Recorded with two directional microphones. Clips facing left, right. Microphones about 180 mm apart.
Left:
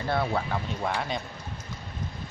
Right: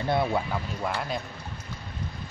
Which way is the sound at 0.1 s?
15° right (ahead or behind).